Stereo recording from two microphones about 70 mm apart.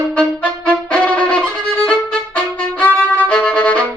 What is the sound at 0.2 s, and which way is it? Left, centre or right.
Music, centre.